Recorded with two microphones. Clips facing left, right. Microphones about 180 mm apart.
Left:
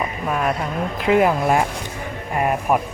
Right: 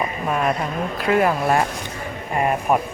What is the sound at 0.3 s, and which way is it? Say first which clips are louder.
Speech: even; centre (ahead or behind).